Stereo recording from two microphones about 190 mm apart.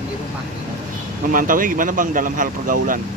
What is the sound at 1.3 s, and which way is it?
Speech, 45° right (ahead or behind).